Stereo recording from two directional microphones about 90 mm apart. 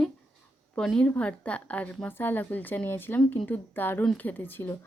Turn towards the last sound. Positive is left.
turn(degrees=25)  # may be behind; listen again after turning